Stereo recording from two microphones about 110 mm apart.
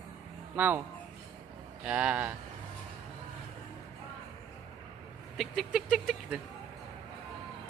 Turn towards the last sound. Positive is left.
turn(degrees=0)  # may be behind; listen again after turning